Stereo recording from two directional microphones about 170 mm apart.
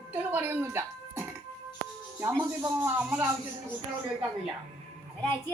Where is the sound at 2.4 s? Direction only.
10° right (ahead or behind).